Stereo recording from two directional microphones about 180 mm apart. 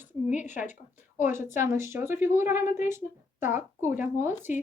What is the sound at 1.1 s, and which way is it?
A woman's voice, 10° right (ahead or behind).